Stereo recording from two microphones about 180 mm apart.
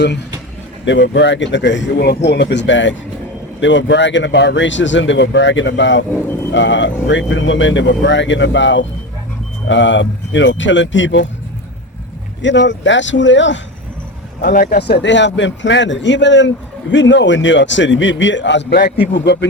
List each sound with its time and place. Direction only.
0.9 s speech: 80° left
12.4 s speech: 85° left
14.4 s a man's voice: 55° left (ahead or behind); by 19.5 s 70° left (ahead or behind)